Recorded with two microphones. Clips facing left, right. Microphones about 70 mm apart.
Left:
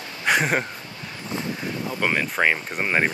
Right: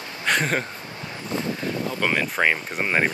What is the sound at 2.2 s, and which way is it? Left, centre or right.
Speech, centre.